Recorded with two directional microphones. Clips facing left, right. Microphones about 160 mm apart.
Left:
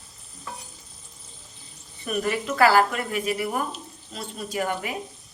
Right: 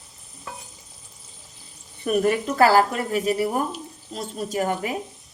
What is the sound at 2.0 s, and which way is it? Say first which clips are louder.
A woman's voice: right 5 dB; 45° right (ahead or behind).